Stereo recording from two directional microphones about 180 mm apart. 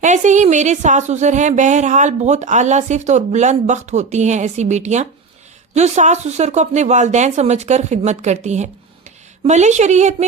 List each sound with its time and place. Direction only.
0.0 s a woman's voice: 40° right (ahead or behind)